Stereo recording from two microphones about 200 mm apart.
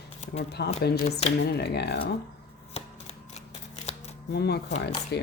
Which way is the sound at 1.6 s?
55° left (ahead or behind).